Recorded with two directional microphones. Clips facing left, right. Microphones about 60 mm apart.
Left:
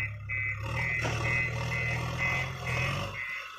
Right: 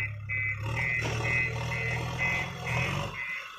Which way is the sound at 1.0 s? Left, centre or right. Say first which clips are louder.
Right 1 dB; centre.